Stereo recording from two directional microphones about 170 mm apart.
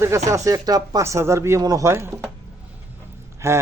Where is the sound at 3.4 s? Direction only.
15° right (ahead or behind).